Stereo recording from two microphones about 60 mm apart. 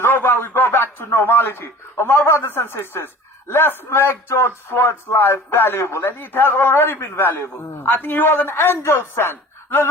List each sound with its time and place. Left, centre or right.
0.0 s a man's voice: left